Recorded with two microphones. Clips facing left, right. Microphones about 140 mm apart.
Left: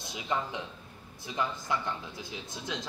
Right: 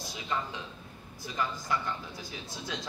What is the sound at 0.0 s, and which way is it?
A man's voice, 20° left (ahead or behind).